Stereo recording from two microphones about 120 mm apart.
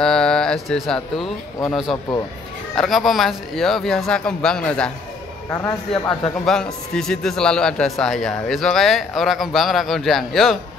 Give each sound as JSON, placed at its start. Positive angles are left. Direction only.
{"t": 0.0, "sound": "a man's voice", "side_deg": 5}
{"t": 5.5, "sound": "a man's voice", "side_deg": 25}
{"t": 5.9, "sound": "a man's voice", "side_deg": 5}